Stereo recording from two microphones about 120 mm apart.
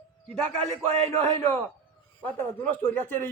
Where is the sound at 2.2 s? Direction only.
20° left (ahead or behind).